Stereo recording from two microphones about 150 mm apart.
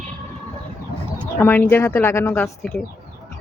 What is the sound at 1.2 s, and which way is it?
A woman's voice, 15° left (ahead or behind).